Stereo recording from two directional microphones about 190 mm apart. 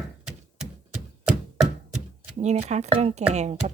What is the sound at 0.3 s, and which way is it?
Chopping, 5° right (ahead or behind).